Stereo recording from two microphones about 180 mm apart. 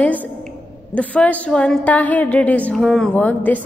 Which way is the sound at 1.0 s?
10° left (ahead or behind).